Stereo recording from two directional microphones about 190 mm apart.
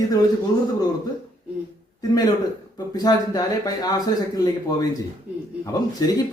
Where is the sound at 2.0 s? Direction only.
20° left (ahead or behind).